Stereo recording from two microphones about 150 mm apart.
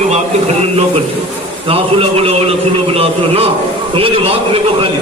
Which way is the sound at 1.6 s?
40° right (ahead or behind).